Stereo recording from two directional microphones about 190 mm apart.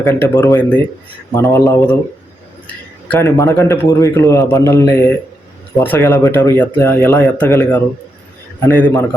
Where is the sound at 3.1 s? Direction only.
15° left (ahead or behind).